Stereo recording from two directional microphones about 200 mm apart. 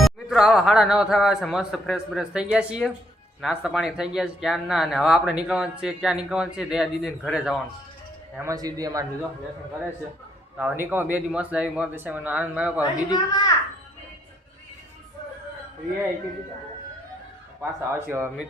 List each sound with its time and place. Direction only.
0.0 s speech: centre (ahead or behind)
8.4 s speech: 15° right (ahead or behind)
10.6 s speech: 5° right (ahead or behind)
12.8 s speech: 20° left (ahead or behind)
17.6 s speech: 10° right (ahead or behind)